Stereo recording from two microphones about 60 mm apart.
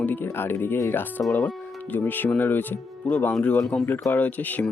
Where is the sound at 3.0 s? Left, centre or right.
Left.